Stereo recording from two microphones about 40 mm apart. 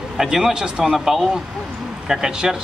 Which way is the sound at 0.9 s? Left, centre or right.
Centre.